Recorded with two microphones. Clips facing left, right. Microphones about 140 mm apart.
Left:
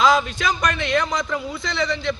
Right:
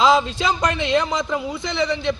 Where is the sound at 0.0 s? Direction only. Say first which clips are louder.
Right 1 dB; 25° right (ahead or behind).